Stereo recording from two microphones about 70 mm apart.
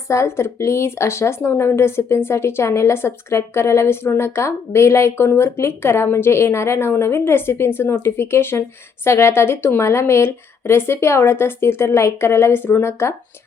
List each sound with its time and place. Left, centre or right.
0.1 s speech: left